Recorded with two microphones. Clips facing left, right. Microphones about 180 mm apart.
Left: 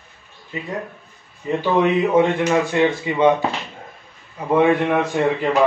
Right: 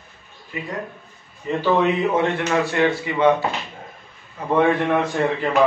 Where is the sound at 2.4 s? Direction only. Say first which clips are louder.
Left 2 dB; 20° left (ahead or behind).